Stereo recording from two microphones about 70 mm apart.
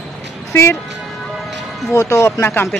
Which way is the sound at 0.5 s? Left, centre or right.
Left.